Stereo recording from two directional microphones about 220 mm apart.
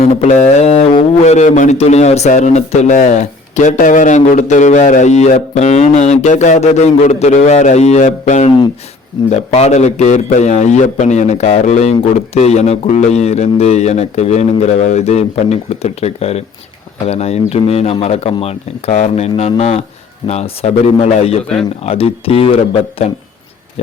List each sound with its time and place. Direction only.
0.0 s speech: 30° left (ahead or behind)